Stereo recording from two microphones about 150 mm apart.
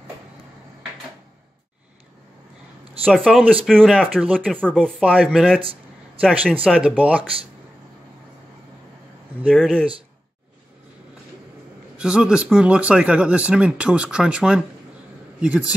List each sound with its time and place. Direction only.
3.1 s speech: centre (ahead or behind)
4.1 s speech: 5° right (ahead or behind)
4.6 s speech: 5° left (ahead or behind)
5.0 s speech: 10° right (ahead or behind)
5.6 s a sound: 35° right (ahead or behind)
6.4 s speech: 10° right (ahead or behind)
9.5 s speech: 5° left (ahead or behind)
12.0 s speech: 5° right (ahead or behind)